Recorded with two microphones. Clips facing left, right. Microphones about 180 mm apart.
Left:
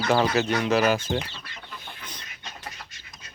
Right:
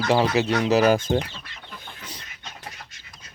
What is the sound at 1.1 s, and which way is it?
Speech, 25° right (ahead or behind).